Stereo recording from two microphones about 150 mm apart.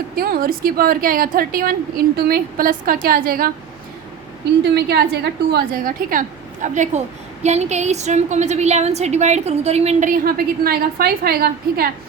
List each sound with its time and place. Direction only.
0.2 s a woman's voice: 80° right
2.1 s a woman's voice: 85° right
4.7 s a woman's voice: 90° right; by 10.1 s 45° right (ahead or behind)
10.1 s a woman's voice: 80° right